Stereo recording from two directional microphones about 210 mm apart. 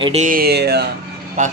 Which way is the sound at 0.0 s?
30° right (ahead or behind).